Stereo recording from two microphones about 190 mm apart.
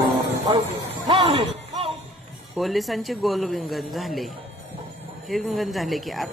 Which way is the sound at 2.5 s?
Centre (ahead or behind).